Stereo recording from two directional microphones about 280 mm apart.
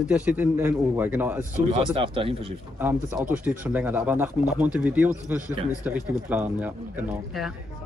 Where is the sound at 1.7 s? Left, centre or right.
Centre.